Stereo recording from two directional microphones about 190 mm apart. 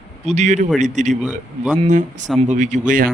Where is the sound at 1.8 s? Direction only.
40° right (ahead or behind).